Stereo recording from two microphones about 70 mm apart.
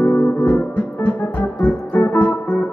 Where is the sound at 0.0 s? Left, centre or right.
Left.